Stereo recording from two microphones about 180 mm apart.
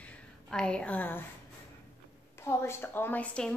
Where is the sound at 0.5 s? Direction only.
5° left (ahead or behind).